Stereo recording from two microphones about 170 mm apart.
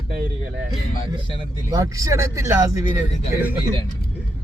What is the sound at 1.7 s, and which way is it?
Speech, 20° right (ahead or behind).